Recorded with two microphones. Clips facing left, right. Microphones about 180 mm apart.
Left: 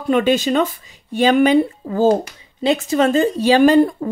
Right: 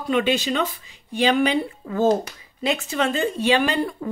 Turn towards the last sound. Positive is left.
turn(degrees=40)  # may be behind; listen again after turning